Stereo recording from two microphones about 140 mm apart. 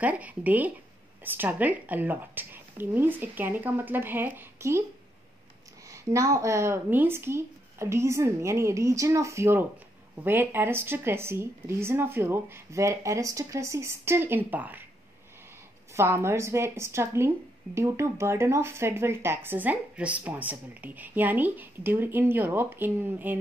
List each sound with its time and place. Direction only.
0.0 s speech: 10° right (ahead or behind)
5.9 s speech: 20° right (ahead or behind)
15.9 s speech: 20° right (ahead or behind)